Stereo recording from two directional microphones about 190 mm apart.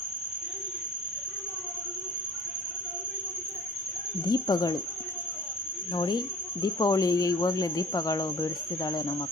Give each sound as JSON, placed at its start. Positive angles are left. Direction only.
{"t": 4.3, "sound": "cricket", "side_deg": 20}
{"t": 5.9, "sound": "cricket", "side_deg": 25}